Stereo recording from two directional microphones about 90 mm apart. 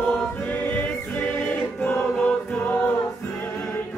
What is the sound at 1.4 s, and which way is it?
Choir, 10° left (ahead or behind).